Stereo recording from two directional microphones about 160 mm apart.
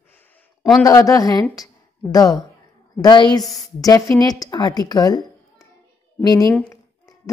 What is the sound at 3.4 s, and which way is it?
Speech, centre (ahead or behind).